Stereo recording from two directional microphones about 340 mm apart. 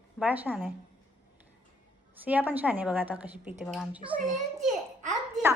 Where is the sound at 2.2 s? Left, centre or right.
Centre.